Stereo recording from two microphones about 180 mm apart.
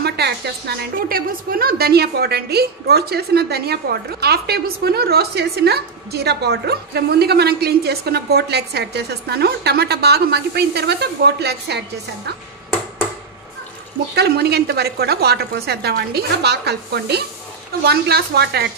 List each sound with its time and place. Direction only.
0.0 s a woman's voice: 60° right (ahead or behind)
14.1 s a woman's voice: 65° right (ahead or behind)